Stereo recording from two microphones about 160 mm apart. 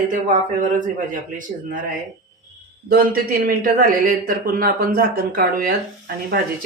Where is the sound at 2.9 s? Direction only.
65° right (ahead or behind).